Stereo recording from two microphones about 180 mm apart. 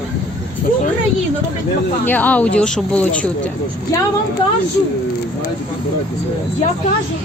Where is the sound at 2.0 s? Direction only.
10° left (ahead or behind).